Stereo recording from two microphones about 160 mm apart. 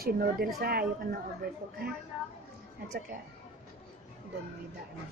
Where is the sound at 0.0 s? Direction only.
70° right (ahead or behind).